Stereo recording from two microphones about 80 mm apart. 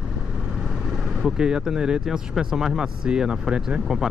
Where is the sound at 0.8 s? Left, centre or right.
Centre.